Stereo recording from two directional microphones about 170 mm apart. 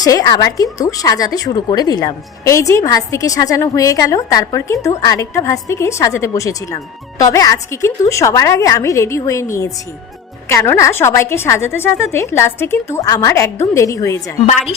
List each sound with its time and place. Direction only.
0.0 s a woman's voice: 20° left (ahead or behind)